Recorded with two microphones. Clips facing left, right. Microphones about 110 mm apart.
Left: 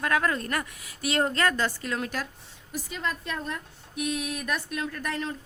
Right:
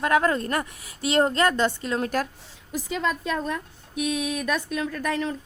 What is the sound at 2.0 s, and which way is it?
Speech, 45° right (ahead or behind).